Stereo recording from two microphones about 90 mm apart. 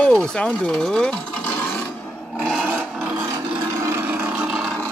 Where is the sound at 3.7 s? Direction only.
35° right (ahead or behind).